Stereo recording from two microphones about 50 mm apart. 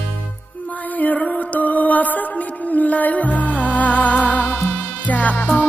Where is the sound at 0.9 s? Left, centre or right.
Left.